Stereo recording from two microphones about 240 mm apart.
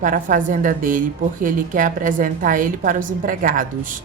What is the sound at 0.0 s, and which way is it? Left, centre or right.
A woman's voice, right.